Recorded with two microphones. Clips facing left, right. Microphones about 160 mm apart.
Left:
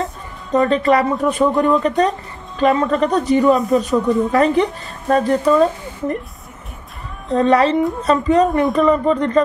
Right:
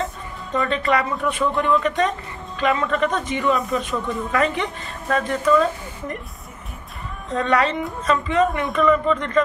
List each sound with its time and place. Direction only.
0.5 s a woman's voice: 40° left (ahead or behind)
7.2 s a woman's voice: 35° left (ahead or behind)